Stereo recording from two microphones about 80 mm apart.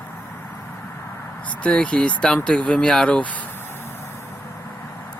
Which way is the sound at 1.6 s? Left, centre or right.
Centre.